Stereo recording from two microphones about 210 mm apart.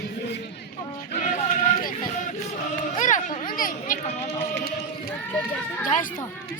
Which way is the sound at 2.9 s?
35° left (ahead or behind).